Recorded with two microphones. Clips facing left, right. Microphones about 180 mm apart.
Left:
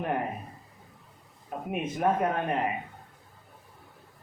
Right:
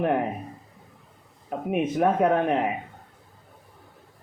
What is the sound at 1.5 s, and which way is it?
A man's voice, 65° right (ahead or behind).